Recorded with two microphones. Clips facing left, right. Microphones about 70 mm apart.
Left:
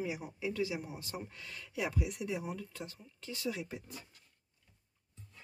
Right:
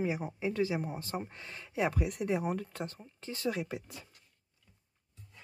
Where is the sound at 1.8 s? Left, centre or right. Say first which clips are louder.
Right 5 dB; right.